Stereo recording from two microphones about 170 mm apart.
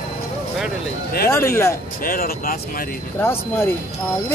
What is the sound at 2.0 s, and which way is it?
Speech, 60° left (ahead or behind).